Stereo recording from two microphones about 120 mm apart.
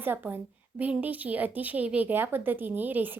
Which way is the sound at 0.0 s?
15° right (ahead or behind).